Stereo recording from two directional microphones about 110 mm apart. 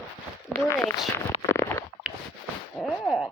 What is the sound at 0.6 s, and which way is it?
Speech, 25° left (ahead or behind).